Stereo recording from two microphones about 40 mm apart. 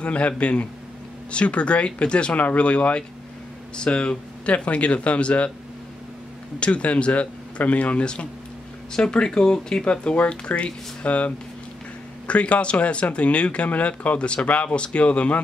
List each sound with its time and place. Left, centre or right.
0.0 s speech: left
6.6 s speech: left
8.9 s speech: left